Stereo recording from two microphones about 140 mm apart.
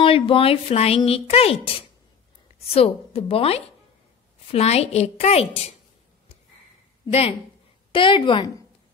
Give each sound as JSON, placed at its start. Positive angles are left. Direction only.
{"t": 0.0, "sound": "a woman's voice", "side_deg": 40}
{"t": 2.7, "sound": "a woman's voice", "side_deg": 45}
{"t": 7.1, "sound": "a woman's voice", "side_deg": 45}
{"t": 7.9, "sound": "a woman's voice", "side_deg": 35}